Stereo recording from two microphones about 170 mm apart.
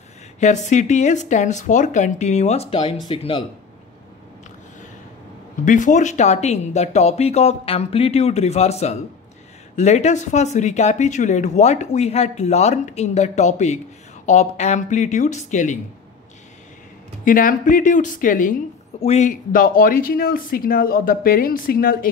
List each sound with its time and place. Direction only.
0.4 s speech: 45° left (ahead or behind)
5.7 s speech: 45° left (ahead or behind)
17.2 s a woman's voice: 55° left (ahead or behind)